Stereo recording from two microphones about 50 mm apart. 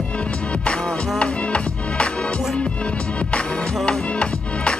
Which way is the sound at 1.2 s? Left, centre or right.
Left.